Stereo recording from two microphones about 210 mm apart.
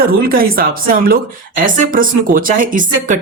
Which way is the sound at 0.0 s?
45° right (ahead or behind).